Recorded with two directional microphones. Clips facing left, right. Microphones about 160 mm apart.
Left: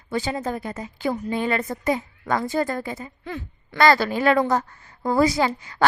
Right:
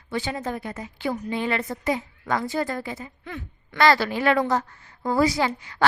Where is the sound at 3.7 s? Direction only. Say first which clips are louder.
Left 2 dB; 45° left (ahead or behind).